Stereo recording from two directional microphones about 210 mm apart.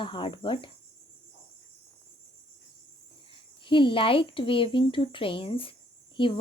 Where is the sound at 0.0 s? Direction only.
25° left (ahead or behind).